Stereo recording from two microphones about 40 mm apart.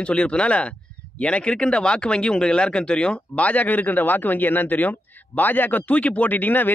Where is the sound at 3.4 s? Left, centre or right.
Left.